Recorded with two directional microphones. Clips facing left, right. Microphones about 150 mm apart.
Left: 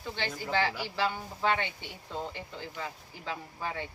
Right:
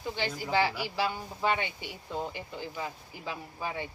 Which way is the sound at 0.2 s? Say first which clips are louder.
Right 2 dB; 15° right (ahead or behind).